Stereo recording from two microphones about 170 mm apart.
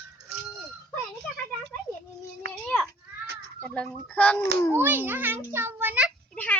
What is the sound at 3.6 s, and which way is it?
Speech, 5° left (ahead or behind).